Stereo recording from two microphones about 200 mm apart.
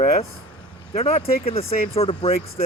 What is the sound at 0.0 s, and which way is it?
Speech, 30° left (ahead or behind).